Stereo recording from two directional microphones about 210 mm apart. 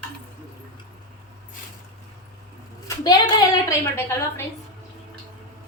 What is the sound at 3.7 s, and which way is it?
Speech, 10° left (ahead or behind).